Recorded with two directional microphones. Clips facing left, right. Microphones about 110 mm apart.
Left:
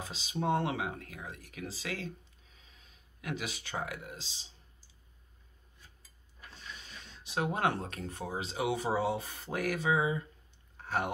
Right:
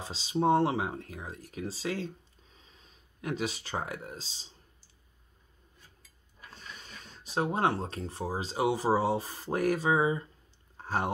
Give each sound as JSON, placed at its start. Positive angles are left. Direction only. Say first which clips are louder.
{"t": 0.0, "sound": "speech", "louder": "right 6 dB", "side_deg": -30}
{"t": 6.8, "sound": "speech", "louder": "right 2 dB", "side_deg": -35}
{"t": 10.8, "sound": "a sound", "louder": "right 2 dB", "side_deg": -35}